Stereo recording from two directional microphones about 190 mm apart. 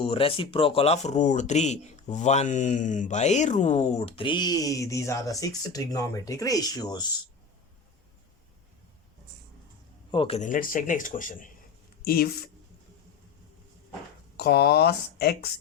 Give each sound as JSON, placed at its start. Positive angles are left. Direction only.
{"t": 0.0, "sound": "speech", "side_deg": 30}
{"t": 10.1, "sound": "speech", "side_deg": 30}
{"t": 14.3, "sound": "speech", "side_deg": 55}